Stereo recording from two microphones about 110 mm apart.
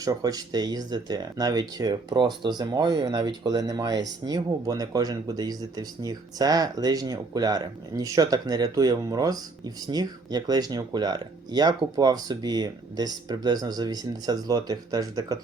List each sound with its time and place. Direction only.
0.0 s speech: 35° right (ahead or behind)